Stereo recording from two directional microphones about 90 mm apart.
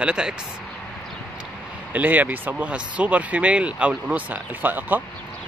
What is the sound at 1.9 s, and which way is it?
Speech, 20° right (ahead or behind).